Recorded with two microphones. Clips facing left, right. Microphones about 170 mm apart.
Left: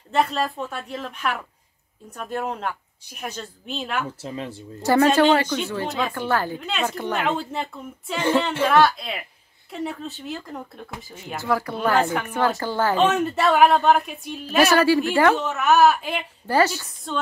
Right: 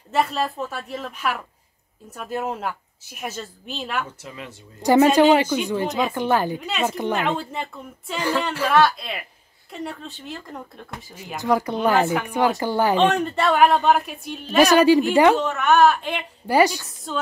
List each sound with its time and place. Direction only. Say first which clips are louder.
0.1 s a woman's voice: even; centre (ahead or behind)
4.2 s speech: left 6 dB; 30° left (ahead or behind)
4.8 s speech: right 2 dB; 15° right (ahead or behind)
6.6 s a woman's voice: right 1 dB; centre (ahead or behind)
6.9 s speech: right 3 dB; 15° right (ahead or behind)
7.2 s a woman's voice: even; centre (ahead or behind)
8.2 s speech: left 3 dB; 25° left (ahead or behind)
8.6 s a woman's voice: right 1 dB; centre (ahead or behind)
11.3 s speech: right 3 dB; 20° right (ahead or behind)
13.0 s a woman's voice: even; centre (ahead or behind)
14.6 s speech: right 3 dB; 15° right (ahead or behind)
15.3 s a woman's voice: right 1 dB; centre (ahead or behind)
16.4 s speech: right 2 dB; 15° right (ahead or behind)
16.8 s a woman's voice: even; centre (ahead or behind)